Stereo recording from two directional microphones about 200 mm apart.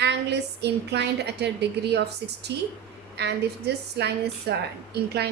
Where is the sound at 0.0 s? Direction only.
55° right (ahead or behind).